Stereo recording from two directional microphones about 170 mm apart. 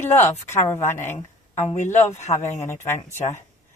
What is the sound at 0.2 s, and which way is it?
Speech, 45° left (ahead or behind).